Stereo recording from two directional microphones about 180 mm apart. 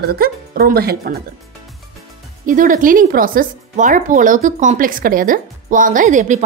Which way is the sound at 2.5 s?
50° right (ahead or behind).